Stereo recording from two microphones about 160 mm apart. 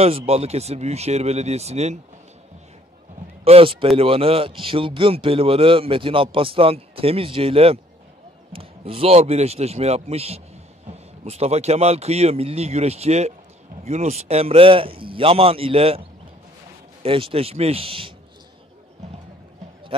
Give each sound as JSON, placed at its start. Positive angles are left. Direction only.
{"t": 0.3, "sound": "speech", "side_deg": -40}
{"t": 3.4, "sound": "speech", "side_deg": -35}